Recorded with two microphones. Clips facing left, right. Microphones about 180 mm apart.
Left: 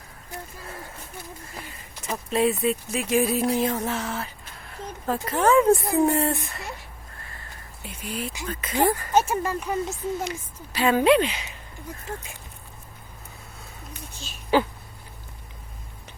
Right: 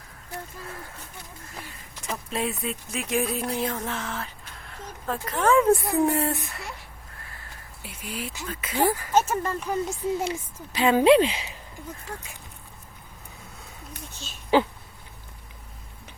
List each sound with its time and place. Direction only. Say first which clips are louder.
2.3 s speech: left 8 dB; centre (ahead or behind)
7.8 s speech: left 3 dB; 5° right (ahead or behind)
9.1 s speech: left 1 dB; 10° left (ahead or behind)
9.9 s speech: right 2 dB; 30° right (ahead or behind)
14.5 s speech: even; 25° right (ahead or behind)